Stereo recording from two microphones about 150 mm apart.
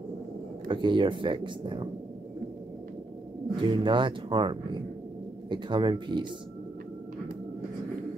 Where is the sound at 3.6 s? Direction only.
35° right (ahead or behind).